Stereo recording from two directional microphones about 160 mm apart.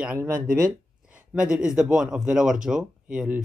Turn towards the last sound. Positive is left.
turn(degrees=-5)  # may be behind; listen again after turning